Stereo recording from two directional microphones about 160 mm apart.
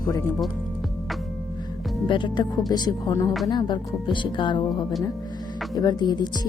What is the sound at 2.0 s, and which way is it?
Speech, 30° left (ahead or behind).